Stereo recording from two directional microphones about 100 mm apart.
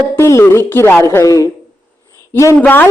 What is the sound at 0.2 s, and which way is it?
Speech, 30° left (ahead or behind).